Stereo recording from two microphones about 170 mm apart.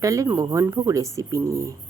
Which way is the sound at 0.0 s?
20° right (ahead or behind).